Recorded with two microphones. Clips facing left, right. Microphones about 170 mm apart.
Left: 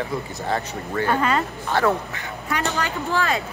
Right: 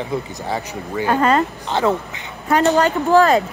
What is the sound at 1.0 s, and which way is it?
Speech, 40° right (ahead or behind).